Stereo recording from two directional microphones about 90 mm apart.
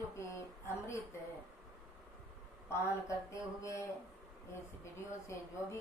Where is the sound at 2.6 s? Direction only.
30° left (ahead or behind).